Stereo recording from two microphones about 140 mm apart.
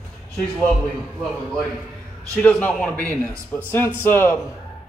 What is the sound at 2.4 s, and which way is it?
A man's voice, 10° left (ahead or behind).